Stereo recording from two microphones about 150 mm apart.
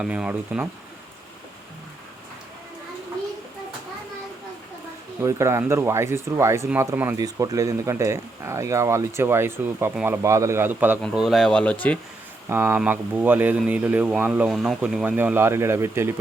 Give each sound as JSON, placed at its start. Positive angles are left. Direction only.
{"t": 0.0, "sound": "speech", "side_deg": -5}
{"t": 5.2, "sound": "speech", "side_deg": -20}
{"t": 7.2, "sound": "speech", "side_deg": -25}
{"t": 12.5, "sound": "speech", "side_deg": -15}